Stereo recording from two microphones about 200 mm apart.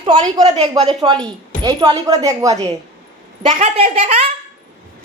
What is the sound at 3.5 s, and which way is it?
Speech, 30° right (ahead or behind).